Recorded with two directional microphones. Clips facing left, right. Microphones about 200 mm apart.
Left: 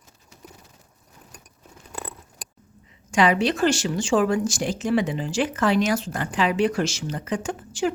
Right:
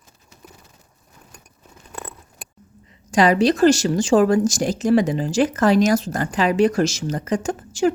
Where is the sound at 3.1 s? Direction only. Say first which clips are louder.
Right 4 dB; 40° right (ahead or behind).